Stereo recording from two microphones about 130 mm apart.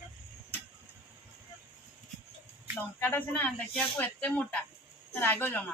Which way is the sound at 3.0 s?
15° left (ahead or behind).